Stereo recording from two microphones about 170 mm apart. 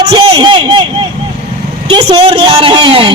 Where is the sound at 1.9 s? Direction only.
30° right (ahead or behind).